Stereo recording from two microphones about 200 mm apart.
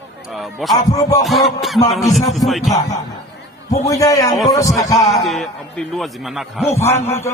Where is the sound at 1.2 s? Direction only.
Centre (ahead or behind).